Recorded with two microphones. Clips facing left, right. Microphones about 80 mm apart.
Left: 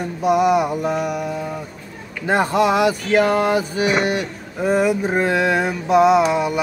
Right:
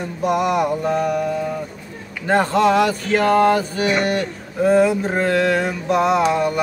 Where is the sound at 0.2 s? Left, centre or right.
Centre.